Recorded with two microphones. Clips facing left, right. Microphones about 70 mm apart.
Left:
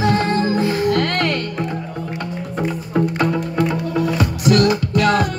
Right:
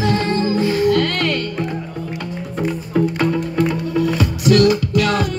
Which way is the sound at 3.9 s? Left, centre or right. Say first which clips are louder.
Right 1 dB; left.